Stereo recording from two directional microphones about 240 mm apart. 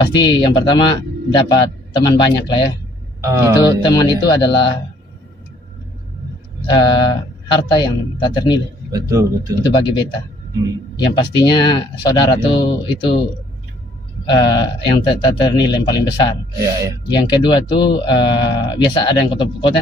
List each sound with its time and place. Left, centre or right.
0.0 s speech: centre
3.3 s speech: centre
3.6 s speech: centre
6.7 s speech: centre
8.9 s speech: centre
9.7 s speech: centre
11.1 s speech: centre
14.2 s speech: centre